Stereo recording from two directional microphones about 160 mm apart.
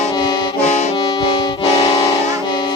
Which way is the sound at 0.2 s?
25° left (ahead or behind).